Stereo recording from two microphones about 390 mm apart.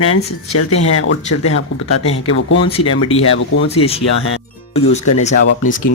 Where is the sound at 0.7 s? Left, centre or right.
Left.